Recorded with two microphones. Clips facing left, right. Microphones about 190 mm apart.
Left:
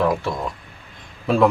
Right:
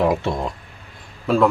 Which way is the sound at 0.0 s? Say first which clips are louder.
Right 1 dB; 20° right (ahead or behind).